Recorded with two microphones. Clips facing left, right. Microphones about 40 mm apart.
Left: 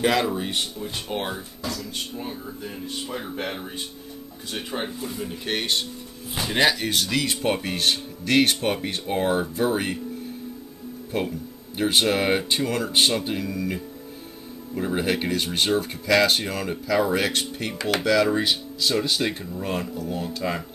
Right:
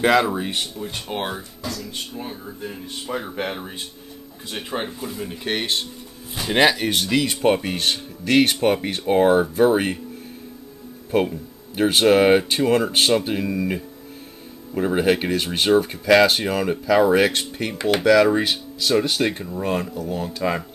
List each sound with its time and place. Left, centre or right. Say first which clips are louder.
0.0 s speech: right 4 dB; centre
6.9 s speech: right 3 dB; right
7.2 s speech: right 5 dB; centre
11.1 s speech: right 7 dB; centre